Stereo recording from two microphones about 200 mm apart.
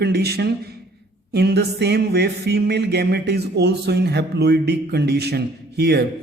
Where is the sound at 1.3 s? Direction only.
55° right (ahead or behind).